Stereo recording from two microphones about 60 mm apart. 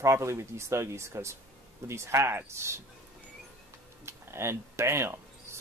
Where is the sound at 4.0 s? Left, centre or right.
Right.